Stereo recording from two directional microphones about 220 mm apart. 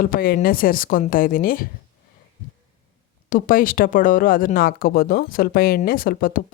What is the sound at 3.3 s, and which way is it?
Speech, 40° left (ahead or behind).